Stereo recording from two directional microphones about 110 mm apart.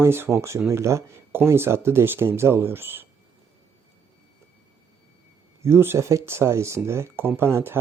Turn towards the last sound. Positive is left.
turn(degrees=-20)  # may be behind; listen again after turning